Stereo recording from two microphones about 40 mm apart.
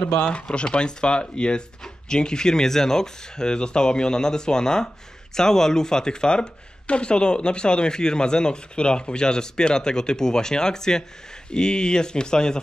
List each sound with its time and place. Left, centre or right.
0.2 s speech: left